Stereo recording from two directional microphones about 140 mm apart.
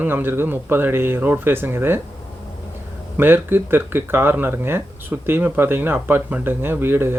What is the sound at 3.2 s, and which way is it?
Speech, 15° right (ahead or behind).